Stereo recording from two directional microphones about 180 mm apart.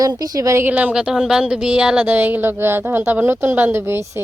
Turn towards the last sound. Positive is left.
turn(degrees=-15)  # may be behind; listen again after turning